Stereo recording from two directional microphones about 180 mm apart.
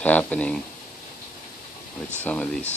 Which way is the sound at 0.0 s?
10° left (ahead or behind).